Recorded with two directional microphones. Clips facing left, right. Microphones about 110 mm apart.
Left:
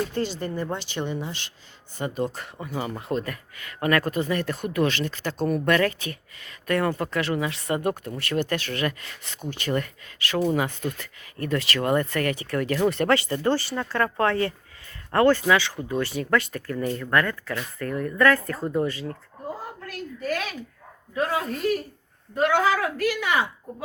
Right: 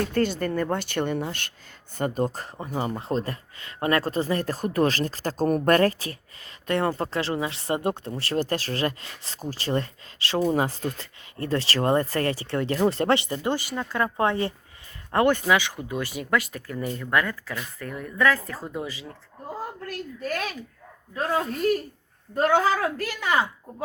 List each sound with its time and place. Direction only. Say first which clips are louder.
0.1 s speech: right 4 dB; 50° right (ahead or behind); by 19.1 s 5° right (ahead or behind)
22.4 s speech: even; 40° right (ahead or behind)